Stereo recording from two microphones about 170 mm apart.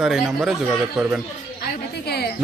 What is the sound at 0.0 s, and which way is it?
A man's voice, centre (ahead or behind).